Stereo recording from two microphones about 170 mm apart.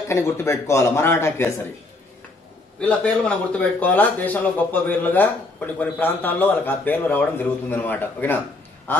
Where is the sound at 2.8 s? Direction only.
10° left (ahead or behind).